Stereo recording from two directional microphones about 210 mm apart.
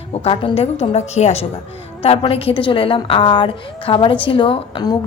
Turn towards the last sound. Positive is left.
turn(degrees=20)  # may be behind; listen again after turning